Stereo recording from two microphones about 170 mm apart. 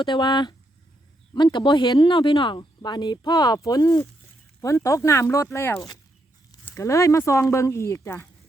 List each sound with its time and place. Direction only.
0.0 s speech: 25° left (ahead or behind)